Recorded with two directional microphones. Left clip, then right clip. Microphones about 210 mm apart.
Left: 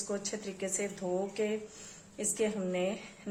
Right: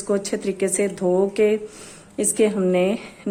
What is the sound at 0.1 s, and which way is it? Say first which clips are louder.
A woman's voice: right 16 dB; 50° right (ahead or behind).